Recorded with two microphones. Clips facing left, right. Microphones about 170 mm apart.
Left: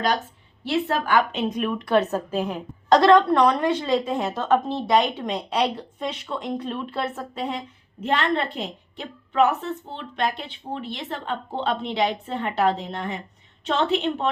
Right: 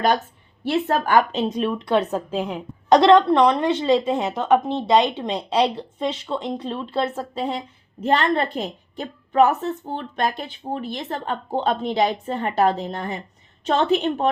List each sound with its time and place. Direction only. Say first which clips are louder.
0.6 s a woman's voice: right 3 dB; 45° right (ahead or behind)